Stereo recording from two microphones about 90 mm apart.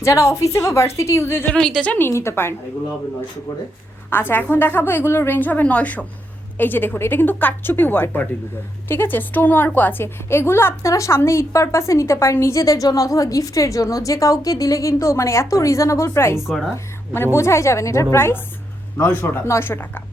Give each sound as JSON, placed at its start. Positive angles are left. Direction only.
{"t": 0.0, "sound": "a woman's voice", "side_deg": 35}
{"t": 1.5, "sound": "a woman's voice", "side_deg": 5}
{"t": 2.0, "sound": "a woman's voice", "side_deg": 30}
{"t": 4.1, "sound": "a woman's voice", "side_deg": 25}
{"t": 16.5, "sound": "a woman's voice", "side_deg": -5}
{"t": 17.3, "sound": "a woman's voice", "side_deg": 30}